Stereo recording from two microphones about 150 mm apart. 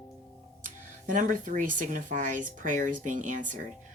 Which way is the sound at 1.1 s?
60° right (ahead or behind).